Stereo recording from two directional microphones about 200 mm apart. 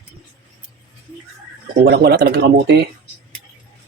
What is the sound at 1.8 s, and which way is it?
Speech, 55° right (ahead or behind).